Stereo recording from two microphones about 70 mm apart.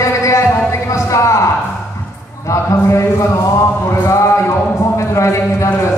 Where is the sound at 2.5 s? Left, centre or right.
Left.